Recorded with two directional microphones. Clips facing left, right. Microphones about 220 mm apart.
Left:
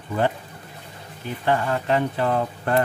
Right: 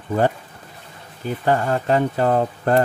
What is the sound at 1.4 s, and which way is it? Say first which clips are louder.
Speech: right 3 dB; 40° right (ahead or behind).